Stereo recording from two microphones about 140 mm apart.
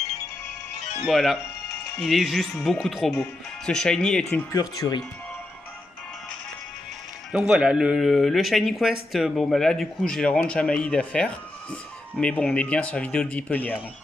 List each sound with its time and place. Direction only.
1.0 s speech: centre (ahead or behind)
4.3 s speech: 20° left (ahead or behind)
7.3 s a man's voice: 5° right (ahead or behind); by 13.7 s 10° left (ahead or behind)